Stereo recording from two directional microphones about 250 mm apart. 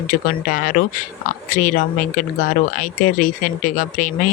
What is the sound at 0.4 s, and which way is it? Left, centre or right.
Speech, left.